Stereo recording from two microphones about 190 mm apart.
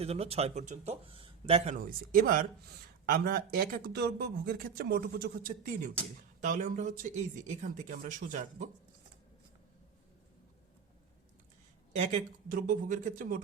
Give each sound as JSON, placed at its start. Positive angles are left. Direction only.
{"t": 0.0, "sound": "speech", "side_deg": -30}
{"t": 1.7, "sound": "speech", "side_deg": -45}
{"t": 11.9, "sound": "speech", "side_deg": -40}